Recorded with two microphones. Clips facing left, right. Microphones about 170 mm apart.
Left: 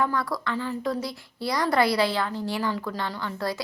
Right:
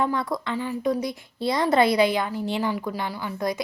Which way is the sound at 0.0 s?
20° right (ahead or behind).